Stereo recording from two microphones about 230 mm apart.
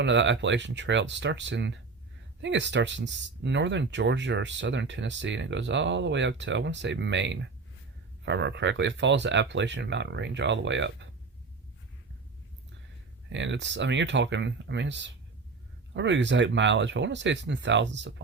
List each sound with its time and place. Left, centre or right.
0.0 s speech: right
13.3 s speech: right